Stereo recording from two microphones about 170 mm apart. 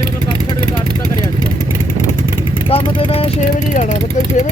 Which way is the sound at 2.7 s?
35° left (ahead or behind).